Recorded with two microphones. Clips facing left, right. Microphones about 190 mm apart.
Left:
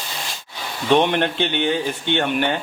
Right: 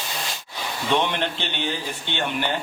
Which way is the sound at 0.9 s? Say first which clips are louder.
Left 7 dB; 60° left (ahead or behind).